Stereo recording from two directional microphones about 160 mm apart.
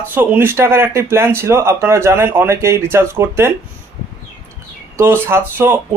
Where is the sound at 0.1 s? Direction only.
10° right (ahead or behind).